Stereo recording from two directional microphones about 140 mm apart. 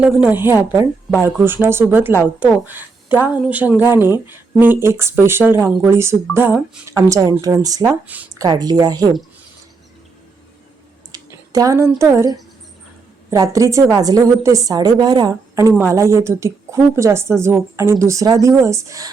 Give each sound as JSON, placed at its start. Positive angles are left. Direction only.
{"t": 0.0, "sound": "a woman's voice", "side_deg": -10}
{"t": 6.9, "sound": "a woman's voice", "side_deg": -25}
{"t": 8.0, "sound": "a woman's voice", "side_deg": -10}
{"t": 8.4, "sound": "a woman's voice", "side_deg": -30}
{"t": 11.1, "sound": "a sound", "side_deg": -25}
{"t": 11.9, "sound": "a woman's voice", "side_deg": -20}